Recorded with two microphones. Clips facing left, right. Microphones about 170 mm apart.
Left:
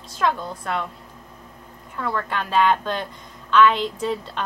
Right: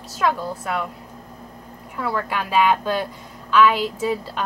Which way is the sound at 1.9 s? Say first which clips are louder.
Right 1 dB; 10° right (ahead or behind).